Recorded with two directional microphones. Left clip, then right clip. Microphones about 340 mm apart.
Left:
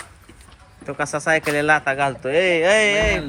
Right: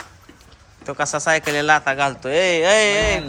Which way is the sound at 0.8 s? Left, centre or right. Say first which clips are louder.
Right 2 dB; centre.